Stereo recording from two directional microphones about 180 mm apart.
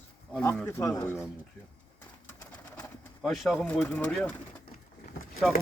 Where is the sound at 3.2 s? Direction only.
Centre (ahead or behind).